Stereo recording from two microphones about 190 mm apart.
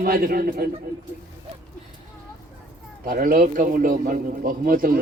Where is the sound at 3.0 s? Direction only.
50° right (ahead or behind).